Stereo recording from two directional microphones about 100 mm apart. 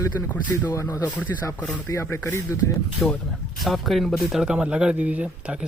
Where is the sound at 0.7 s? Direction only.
30° left (ahead or behind).